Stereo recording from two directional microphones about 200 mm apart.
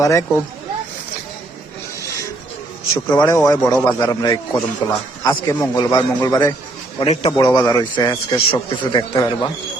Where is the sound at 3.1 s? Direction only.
15° left (ahead or behind).